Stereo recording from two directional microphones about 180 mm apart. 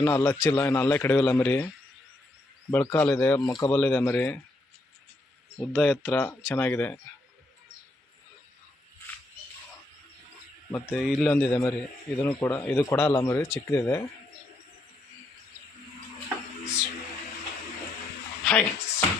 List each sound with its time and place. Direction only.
0.0 s speech: 15° left (ahead or behind)
2.6 s speech: 15° left (ahead or behind)
5.5 s speech: 5° left (ahead or behind)
10.7 s speech: 10° left (ahead or behind)
11.0 s a man's voice: centre (ahead or behind)
11.3 s speech: 10° left (ahead or behind)
18.4 s music: 10° left (ahead or behind)